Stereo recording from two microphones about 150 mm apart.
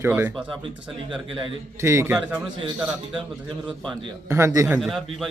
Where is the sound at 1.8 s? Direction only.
20° right (ahead or behind).